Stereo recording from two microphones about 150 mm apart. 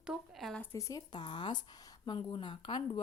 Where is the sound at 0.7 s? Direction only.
20° left (ahead or behind).